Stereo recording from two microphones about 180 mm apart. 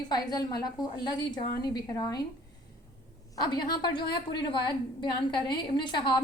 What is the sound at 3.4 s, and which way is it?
A woman's voice, 25° left (ahead or behind).